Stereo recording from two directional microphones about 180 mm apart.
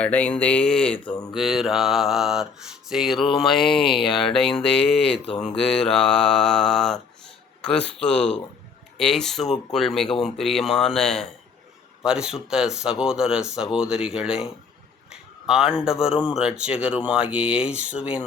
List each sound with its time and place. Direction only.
0.0 s speech: 10° left (ahead or behind)
3.8 s speech: 30° left (ahead or behind)
4.1 s speech: centre (ahead or behind)